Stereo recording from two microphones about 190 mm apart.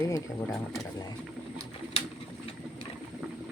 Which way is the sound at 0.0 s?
10° left (ahead or behind).